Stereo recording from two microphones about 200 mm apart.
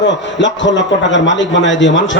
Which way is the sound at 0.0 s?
65° left (ahead or behind).